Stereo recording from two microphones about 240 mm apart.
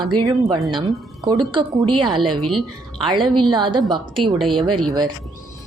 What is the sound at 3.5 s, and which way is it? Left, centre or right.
Speech, centre.